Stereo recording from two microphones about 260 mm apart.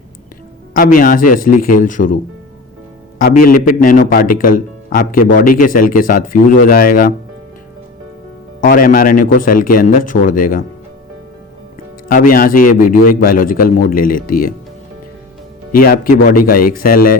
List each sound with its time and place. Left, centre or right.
0.7 s speech: left
3.2 s speech: left
8.6 s speech: left
12.0 s speech: left
15.7 s speech: left